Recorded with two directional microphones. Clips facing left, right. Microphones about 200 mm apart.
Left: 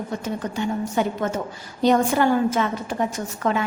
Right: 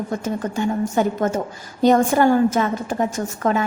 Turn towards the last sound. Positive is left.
turn(degrees=-45)  # may be behind; listen again after turning